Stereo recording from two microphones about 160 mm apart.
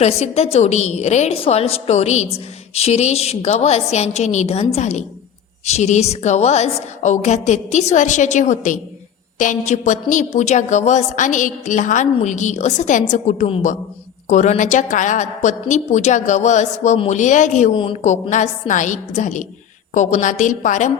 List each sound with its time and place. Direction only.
0.0 s a woman's voice: 40° left (ahead or behind)